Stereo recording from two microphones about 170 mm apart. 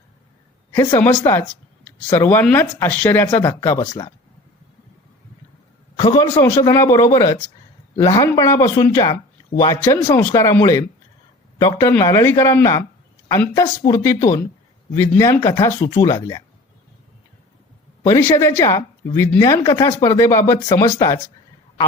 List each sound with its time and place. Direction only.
0.9 s speech: 15° left (ahead or behind)
6.0 s speech: 25° left (ahead or behind)
18.0 s speech: 15° left (ahead or behind)